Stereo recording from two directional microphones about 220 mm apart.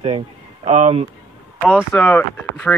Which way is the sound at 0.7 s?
30° right (ahead or behind).